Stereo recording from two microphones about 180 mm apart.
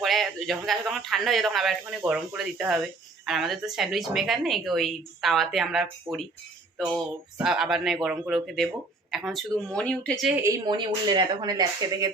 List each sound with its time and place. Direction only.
0.0 s speech: centre (ahead or behind)
6.7 s music: centre (ahead or behind)
7.3 s speech: 5° right (ahead or behind)
10.3 s speech: 15° right (ahead or behind)